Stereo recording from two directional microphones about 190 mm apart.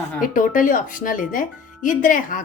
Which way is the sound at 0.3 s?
45° left (ahead or behind).